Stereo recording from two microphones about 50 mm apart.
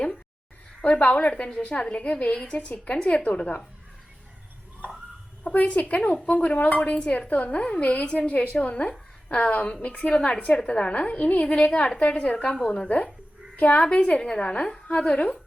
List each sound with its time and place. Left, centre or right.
0.8 s a woman's voice: left
5.4 s a woman's voice: left
13.6 s a woman's voice: left